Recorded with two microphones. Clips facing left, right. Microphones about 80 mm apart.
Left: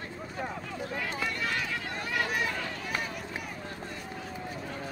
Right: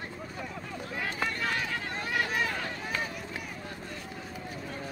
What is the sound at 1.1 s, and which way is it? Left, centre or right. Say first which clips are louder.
Run: right 4 dB; right.